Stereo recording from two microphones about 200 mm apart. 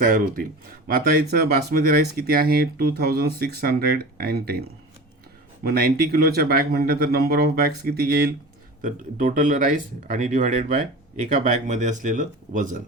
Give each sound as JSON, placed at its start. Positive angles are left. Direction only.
{"t": 0.0, "sound": "speech", "side_deg": -45}
{"t": 5.6, "sound": "speech", "side_deg": -50}